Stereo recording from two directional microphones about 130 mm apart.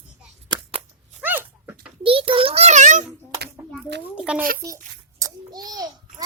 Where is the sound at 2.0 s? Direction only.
45° right (ahead or behind); by 3.0 s 65° right (ahead or behind).